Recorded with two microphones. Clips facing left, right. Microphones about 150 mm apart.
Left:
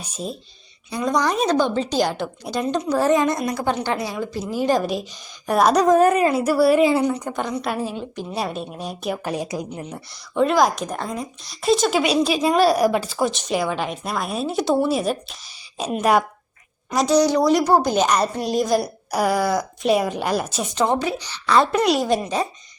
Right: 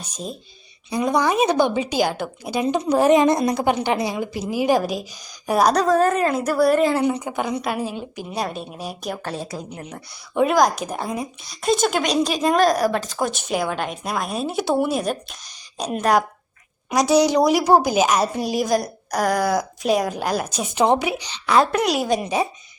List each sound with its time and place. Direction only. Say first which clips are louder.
0.0 s speech: left 2 dB; centre (ahead or behind)
0.9 s a woman's voice: right 1 dB; 15° right (ahead or behind)
3.2 s a woman's voice: right 4 dB; 35° right (ahead or behind)
3.5 s a woman's voice: right 3 dB; 15° right (ahead or behind); by 5.7 s centre (ahead or behind)
5.7 s a woman's voice: left 3 dB; 15° left (ahead or behind)
7.1 s speech: right 1 dB; 5° right (ahead or behind)
9.2 s a woman's voice: left 3 dB; 15° left (ahead or behind)
10.5 s speech: even; centre (ahead or behind)
17.2 s speech: left 1 dB; 10° right (ahead or behind)
20.7 s a woman's voice: right 3 dB; 15° right (ahead or behind)
21.8 s speech: left 2 dB; centre (ahead or behind)
22.2 s a woman's voice: right 1 dB; 10° right (ahead or behind)